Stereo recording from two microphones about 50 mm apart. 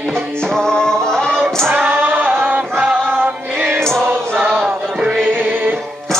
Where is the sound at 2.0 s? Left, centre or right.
Right.